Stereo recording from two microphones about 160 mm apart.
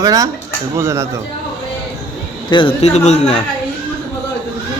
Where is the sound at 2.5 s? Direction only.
30° left (ahead or behind).